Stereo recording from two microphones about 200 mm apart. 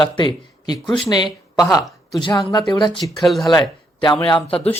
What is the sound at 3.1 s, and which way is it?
Speech, centre (ahead or behind).